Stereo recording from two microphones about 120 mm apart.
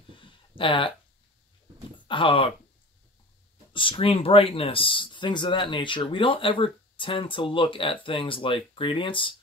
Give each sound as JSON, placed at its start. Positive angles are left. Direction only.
{"t": 0.2, "sound": "a sound", "side_deg": 45}
{"t": 2.0, "sound": "speech", "side_deg": 45}
{"t": 3.7, "sound": "speech", "side_deg": 45}